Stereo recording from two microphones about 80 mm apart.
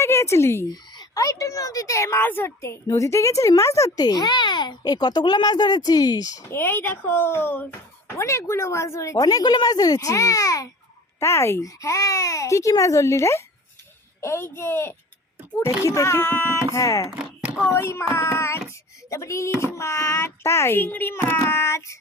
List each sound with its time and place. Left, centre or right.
0.0 s a child's voice: left
6.5 s speech: left
8.2 s speech: left
9.2 s a child's voice: left
11.2 s speech: left
21.3 s speech: left